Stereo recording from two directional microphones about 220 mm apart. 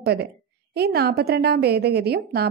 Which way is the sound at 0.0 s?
50° right (ahead or behind).